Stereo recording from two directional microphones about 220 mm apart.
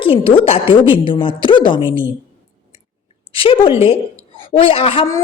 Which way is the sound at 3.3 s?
25° left (ahead or behind).